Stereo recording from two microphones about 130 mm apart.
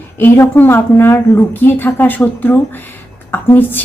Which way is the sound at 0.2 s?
15° left (ahead or behind).